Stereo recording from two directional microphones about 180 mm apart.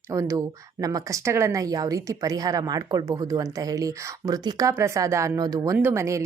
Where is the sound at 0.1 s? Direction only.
15° right (ahead or behind).